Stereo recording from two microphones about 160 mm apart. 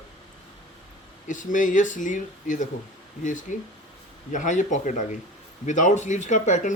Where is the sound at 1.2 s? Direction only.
55° left (ahead or behind).